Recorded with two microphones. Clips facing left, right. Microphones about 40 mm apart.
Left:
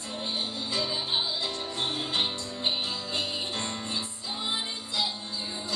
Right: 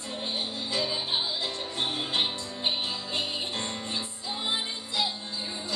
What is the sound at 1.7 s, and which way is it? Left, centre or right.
Music, right.